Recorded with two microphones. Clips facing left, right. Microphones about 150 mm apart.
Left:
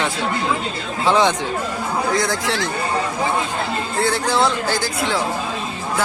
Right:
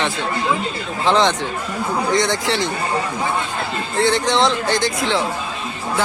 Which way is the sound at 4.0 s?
5° left (ahead or behind).